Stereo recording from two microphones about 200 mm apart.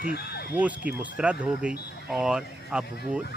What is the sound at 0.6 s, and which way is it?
Speech, 5° right (ahead or behind).